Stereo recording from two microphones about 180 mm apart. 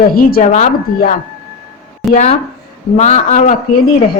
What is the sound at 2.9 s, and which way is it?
Speech, 40° left (ahead or behind).